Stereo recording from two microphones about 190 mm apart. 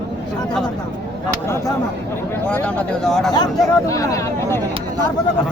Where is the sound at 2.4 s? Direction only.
5° left (ahead or behind).